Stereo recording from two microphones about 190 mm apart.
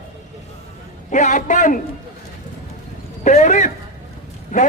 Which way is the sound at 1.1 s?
40° left (ahead or behind).